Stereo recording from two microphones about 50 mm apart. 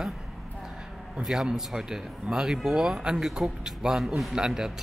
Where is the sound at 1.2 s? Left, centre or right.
Centre.